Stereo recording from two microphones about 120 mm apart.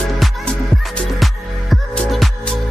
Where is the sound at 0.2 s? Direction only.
5° left (ahead or behind).